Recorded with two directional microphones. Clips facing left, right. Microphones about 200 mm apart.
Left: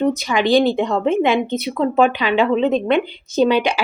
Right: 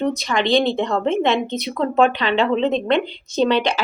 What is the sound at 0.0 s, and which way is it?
Speech, 5° left (ahead or behind).